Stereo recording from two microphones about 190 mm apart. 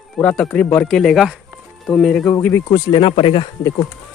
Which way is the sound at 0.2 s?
5° left (ahead or behind).